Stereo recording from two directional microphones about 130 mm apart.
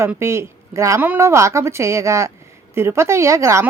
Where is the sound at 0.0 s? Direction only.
20° right (ahead or behind).